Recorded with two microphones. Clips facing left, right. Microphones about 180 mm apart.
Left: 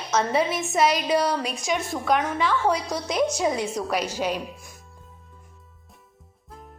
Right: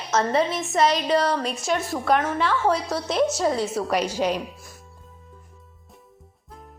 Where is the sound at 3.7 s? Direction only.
5° right (ahead or behind).